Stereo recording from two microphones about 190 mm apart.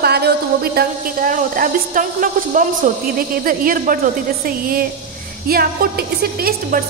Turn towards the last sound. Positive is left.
turn(degrees=-50)  # may be behind; listen again after turning